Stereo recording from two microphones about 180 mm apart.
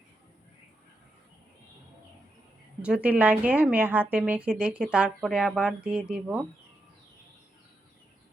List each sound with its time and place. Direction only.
2.8 s a woman's voice: 5° right (ahead or behind)